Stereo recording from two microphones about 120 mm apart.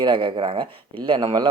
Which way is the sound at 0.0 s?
45° right (ahead or behind).